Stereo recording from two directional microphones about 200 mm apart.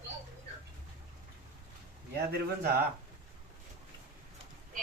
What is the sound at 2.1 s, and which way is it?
Speech, 50° right (ahead or behind).